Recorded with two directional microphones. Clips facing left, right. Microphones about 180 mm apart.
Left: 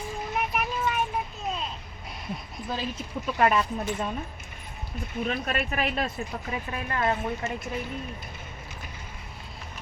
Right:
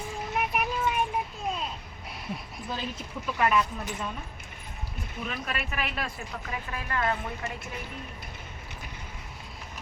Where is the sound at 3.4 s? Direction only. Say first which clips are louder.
Left 2 dB; 35° left (ahead or behind).